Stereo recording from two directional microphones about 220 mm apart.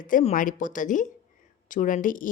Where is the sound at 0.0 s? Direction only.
35° left (ahead or behind).